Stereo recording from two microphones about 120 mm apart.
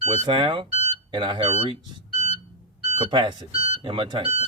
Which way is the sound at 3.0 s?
40° right (ahead or behind).